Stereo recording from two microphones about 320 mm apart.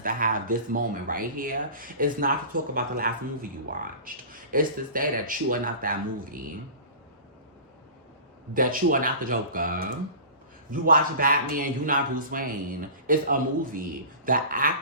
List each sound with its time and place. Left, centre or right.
0.0 s a man's voice: right
8.5 s a man's voice: right